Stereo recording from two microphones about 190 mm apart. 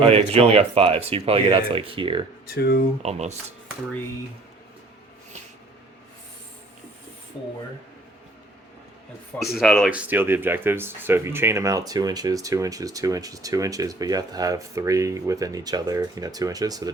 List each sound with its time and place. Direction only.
0.0 s speech: 30° right (ahead or behind)
2.6 s speech: 55° left (ahead or behind)
3.0 s speech: 35° right (ahead or behind)
9.4 s speech: centre (ahead or behind); by 16.9 s 20° right (ahead or behind)